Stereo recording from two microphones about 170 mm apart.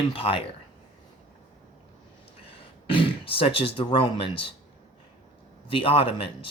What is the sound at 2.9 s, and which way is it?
Speech, 30° left (ahead or behind).